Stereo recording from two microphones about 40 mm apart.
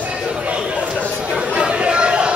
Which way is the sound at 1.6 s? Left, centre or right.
Right.